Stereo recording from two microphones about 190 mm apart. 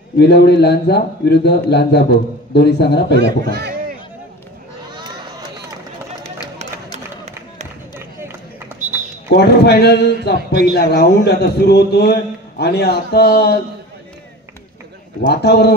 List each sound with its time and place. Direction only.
0.2 s a man's voice: 60° left (ahead or behind)
3.2 s speech: 60° right (ahead or behind)
6.9 s a sound: 35° right (ahead or behind)
9.3 s a man's voice: 60° left (ahead or behind)
15.2 s a man's voice: 60° left (ahead or behind)